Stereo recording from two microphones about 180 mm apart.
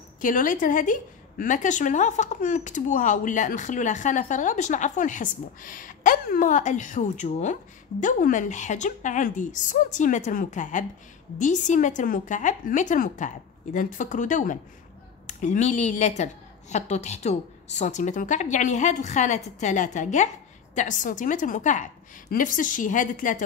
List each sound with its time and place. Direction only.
0.2 s a woman's voice: 45° left (ahead or behind)